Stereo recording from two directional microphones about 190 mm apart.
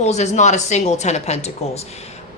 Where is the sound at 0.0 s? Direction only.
35° left (ahead or behind).